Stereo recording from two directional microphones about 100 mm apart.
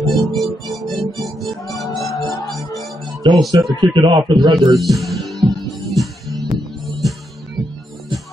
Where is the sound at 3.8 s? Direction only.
55° right (ahead or behind).